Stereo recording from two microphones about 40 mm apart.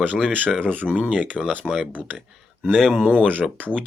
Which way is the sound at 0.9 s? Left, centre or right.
Right.